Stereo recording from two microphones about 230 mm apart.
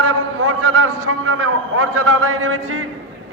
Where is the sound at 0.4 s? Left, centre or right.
Right.